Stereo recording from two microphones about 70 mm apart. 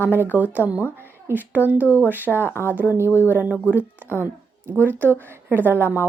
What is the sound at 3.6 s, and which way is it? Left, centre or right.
Speech, right.